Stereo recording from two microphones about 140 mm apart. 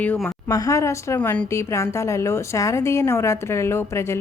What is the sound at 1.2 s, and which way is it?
Speech, 10° left (ahead or behind).